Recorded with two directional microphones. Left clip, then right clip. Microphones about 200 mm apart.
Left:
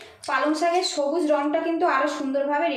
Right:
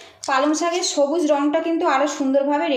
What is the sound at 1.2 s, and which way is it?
A woman's voice, 35° right (ahead or behind).